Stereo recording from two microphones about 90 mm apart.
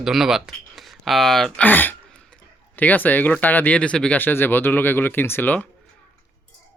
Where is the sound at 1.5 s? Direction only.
20° left (ahead or behind).